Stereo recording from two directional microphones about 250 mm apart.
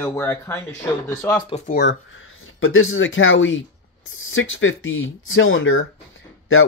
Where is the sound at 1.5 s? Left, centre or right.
Left.